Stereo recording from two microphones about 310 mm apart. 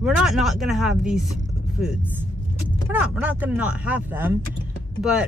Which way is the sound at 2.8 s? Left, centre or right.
Centre.